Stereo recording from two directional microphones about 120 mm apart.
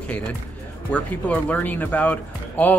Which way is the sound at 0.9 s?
10° left (ahead or behind).